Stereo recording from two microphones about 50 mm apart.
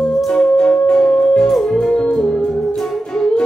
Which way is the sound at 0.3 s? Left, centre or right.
Centre.